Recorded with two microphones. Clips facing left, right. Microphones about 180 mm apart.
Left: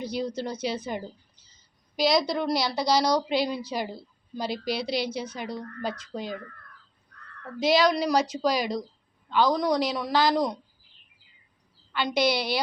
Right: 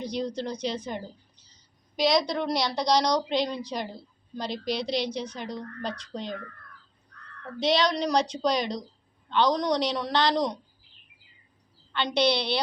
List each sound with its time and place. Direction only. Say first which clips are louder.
0.0 s a woman's voice: even; 5° left (ahead or behind)
7.6 s a woman's voice: left 2 dB; 5° left (ahead or behind)
11.9 s a woman's voice: even; 10° left (ahead or behind)